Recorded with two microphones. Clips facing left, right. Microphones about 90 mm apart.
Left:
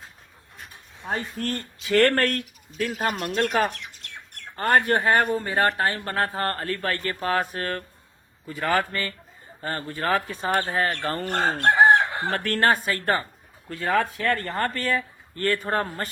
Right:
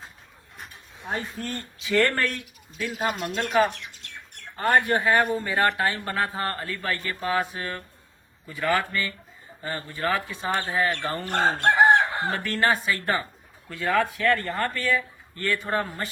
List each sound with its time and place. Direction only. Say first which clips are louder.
1.8 s speech: left 3 dB; 60° left (ahead or behind)
4.7 s speech: left 1 dB; 55° left (ahead or behind)
5.4 s speech: left 1 dB; 35° left (ahead or behind)
11.7 s chicken: left 2 dB; 20° right (ahead or behind)
12.3 s speech: left 5 dB; 55° left (ahead or behind)